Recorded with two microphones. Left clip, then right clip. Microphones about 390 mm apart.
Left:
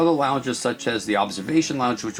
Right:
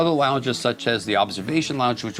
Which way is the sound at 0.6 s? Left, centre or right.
Right.